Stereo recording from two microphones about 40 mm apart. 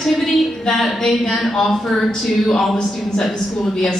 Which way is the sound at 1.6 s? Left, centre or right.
Centre.